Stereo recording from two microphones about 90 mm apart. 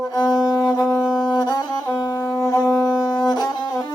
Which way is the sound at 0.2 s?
45° left (ahead or behind).